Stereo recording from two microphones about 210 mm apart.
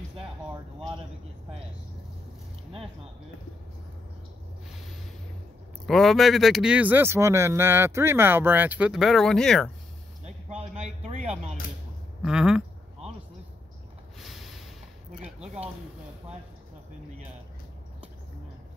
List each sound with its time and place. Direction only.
5.9 s speech: centre (ahead or behind)
10.2 s speech: 30° right (ahead or behind)
12.2 s speech: 5° right (ahead or behind)
14.2 s a sound: centre (ahead or behind)